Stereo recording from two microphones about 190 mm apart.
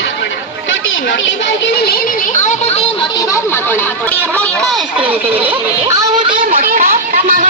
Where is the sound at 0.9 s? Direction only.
85° left; by 3.1 s 35° left (ahead or behind).